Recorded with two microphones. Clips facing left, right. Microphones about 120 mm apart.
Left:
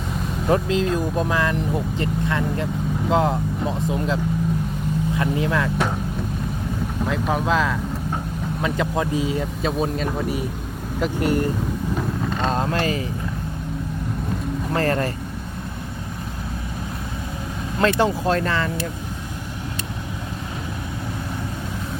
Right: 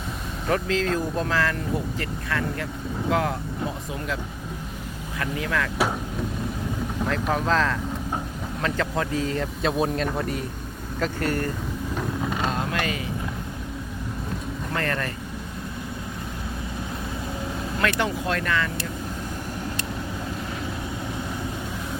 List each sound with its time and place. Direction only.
0.4 s speech: 20° left (ahead or behind)
5.2 s speech: 25° left (ahead or behind)
7.0 s speech: 5° left (ahead or behind)
12.5 s vehicle: 35° left (ahead or behind)
14.7 s speech: 30° left (ahead or behind)
17.7 s speech: 30° left (ahead or behind)